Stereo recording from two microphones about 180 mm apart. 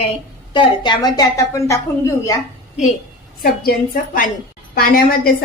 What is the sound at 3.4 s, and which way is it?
A woman's voice, 50° left (ahead or behind).